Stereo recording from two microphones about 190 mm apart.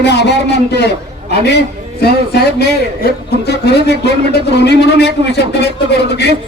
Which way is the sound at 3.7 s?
60° left (ahead or behind).